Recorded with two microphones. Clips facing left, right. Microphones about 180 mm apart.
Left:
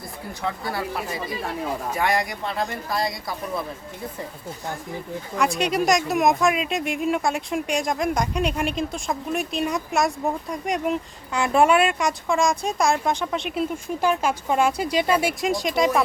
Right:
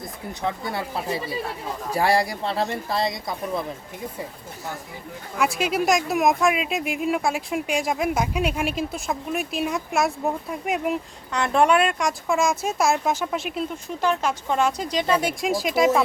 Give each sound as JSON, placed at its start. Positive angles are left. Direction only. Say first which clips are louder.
{"t": 0.4, "sound": "speech", "louder": "even", "side_deg": -25}
{"t": 5.4, "sound": "speech", "louder": "left 1 dB", "side_deg": -5}
{"t": 11.3, "sound": "speech", "louder": "left 1 dB", "side_deg": 5}